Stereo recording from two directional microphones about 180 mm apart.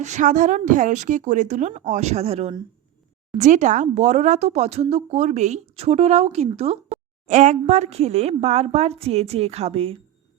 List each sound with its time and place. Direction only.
0.0 s a woman's voice: 40° right (ahead or behind)